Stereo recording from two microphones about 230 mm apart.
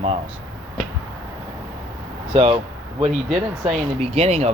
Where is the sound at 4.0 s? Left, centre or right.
Right.